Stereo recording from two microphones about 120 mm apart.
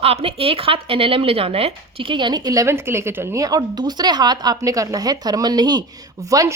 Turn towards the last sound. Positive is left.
turn(degrees=-25)  # may be behind; listen again after turning